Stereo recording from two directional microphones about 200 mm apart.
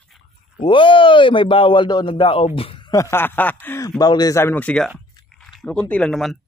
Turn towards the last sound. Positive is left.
turn(degrees=0)  # may be behind; listen again after turning